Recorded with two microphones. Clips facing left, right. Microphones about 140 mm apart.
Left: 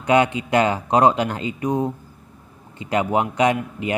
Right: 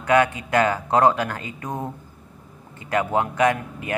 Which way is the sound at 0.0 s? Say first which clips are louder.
Left 1 dB; 20° left (ahead or behind).